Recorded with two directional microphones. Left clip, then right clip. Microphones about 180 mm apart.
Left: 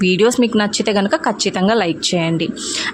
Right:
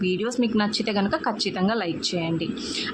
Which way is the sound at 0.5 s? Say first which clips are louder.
Left 8 dB; 40° left (ahead or behind).